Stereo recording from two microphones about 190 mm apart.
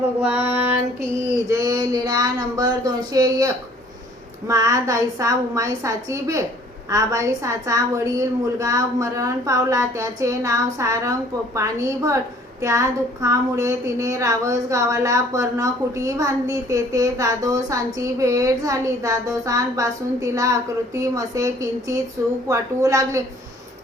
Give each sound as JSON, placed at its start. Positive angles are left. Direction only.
{"t": 0.2, "sound": "speech", "side_deg": -5}
{"t": 1.5, "sound": "a sound", "side_deg": -15}
{"t": 4.4, "sound": "speech", "side_deg": -15}